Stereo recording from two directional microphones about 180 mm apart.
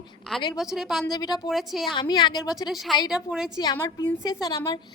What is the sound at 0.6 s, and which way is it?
Speech, centre (ahead or behind).